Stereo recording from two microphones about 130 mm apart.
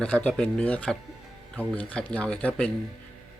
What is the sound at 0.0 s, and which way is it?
Speech, 5° left (ahead or behind).